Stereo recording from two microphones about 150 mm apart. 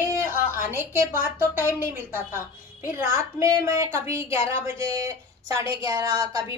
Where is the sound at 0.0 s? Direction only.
15° right (ahead or behind).